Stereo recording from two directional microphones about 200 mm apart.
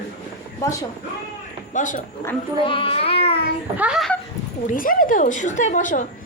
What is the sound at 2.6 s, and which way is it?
Child singing, 25° left (ahead or behind).